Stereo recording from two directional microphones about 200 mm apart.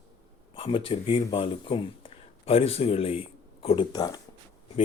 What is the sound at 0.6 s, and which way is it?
Speech, 25° left (ahead or behind).